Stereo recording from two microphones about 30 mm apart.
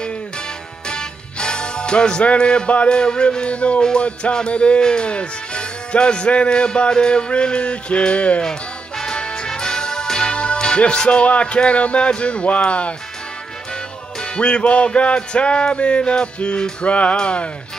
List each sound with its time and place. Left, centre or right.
0.8 s music: left
8.4 s music: left
12.6 s speech: left
14.2 s music: left
14.6 s speech: left
15.0 s music: left
16.8 s speech: left
17.2 s music: left